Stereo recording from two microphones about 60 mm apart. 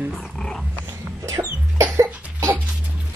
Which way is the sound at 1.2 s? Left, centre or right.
Right.